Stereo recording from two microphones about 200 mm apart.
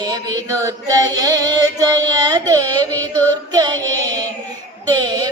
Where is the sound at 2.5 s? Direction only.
20° right (ahead or behind).